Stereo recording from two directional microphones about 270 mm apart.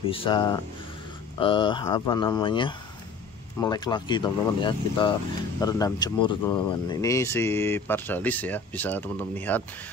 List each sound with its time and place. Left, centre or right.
0.0 s speech: centre